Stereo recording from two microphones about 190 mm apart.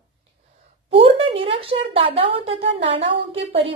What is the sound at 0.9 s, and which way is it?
A woman's voice, 30° right (ahead or behind).